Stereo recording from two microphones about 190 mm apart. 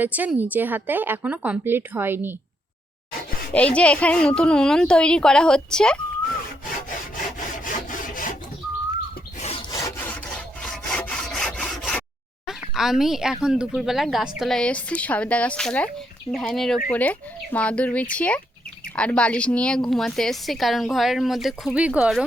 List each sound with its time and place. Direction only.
0.0 s a woman's voice: 10° right (ahead or behind)
3.5 s speech: 5° left (ahead or behind)
7.6 s sawing: 45° left (ahead or behind)
9.4 s rub: 30° left (ahead or behind)
9.7 s wood: 15° left (ahead or behind)
10.3 s sawing: 5° left (ahead or behind)
12.5 s speech: centre (ahead or behind)